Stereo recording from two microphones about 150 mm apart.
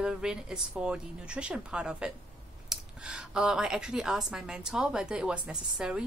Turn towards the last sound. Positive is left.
turn(degrees=-5)  # may be behind; listen again after turning